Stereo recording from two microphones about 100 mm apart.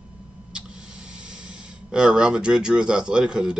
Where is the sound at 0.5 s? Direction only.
10° right (ahead or behind).